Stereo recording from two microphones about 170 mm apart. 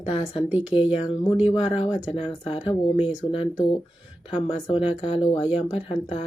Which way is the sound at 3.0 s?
5° right (ahead or behind).